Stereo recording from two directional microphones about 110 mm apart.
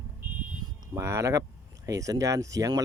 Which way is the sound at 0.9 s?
25° right (ahead or behind).